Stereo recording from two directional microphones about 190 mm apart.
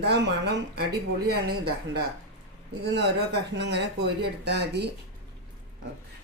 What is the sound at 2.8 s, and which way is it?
Speech, 60° right (ahead or behind).